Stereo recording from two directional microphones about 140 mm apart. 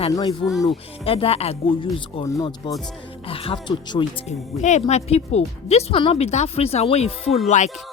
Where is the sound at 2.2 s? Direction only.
25° left (ahead or behind).